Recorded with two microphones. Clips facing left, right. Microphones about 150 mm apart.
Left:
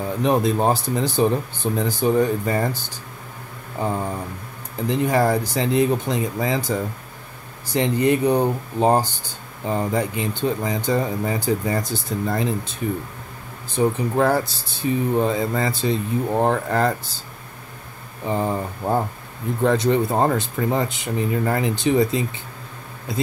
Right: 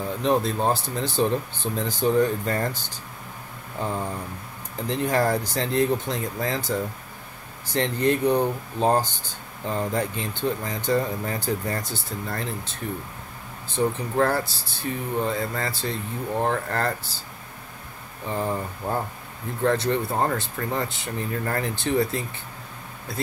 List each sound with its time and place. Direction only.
0.2 s speech: 15° left (ahead or behind)
4.8 s speech: 10° left (ahead or behind)
13.7 s speech: 15° left (ahead or behind)
18.2 s speech: 15° left (ahead or behind)